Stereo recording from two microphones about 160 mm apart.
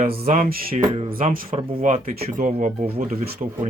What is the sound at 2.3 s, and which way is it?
Speech, 55° right (ahead or behind).